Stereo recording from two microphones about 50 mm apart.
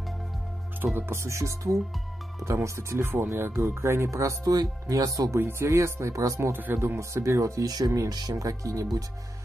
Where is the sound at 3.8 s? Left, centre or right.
Right.